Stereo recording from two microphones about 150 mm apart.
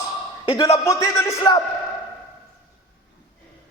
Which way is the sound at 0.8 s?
20° left (ahead or behind).